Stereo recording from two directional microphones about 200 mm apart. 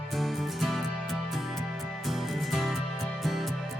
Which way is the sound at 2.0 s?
Centre (ahead or behind).